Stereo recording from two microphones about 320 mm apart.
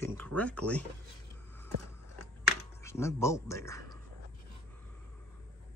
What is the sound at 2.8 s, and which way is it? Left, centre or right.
Speech, centre.